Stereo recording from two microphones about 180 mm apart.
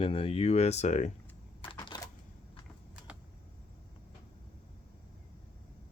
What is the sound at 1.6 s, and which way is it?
Typewriter, 25° left (ahead or behind).